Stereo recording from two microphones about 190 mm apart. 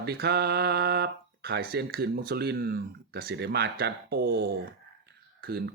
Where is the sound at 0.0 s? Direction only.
60° right (ahead or behind).